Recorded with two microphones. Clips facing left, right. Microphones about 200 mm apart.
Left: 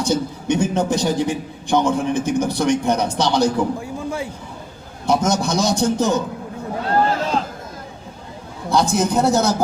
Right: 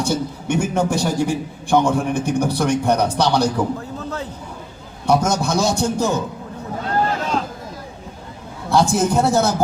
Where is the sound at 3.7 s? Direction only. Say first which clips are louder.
Left 2 dB; 10° left (ahead or behind).